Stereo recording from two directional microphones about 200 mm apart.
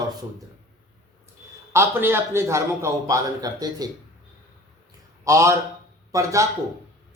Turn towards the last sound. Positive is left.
turn(degrees=-15)  # may be behind; listen again after turning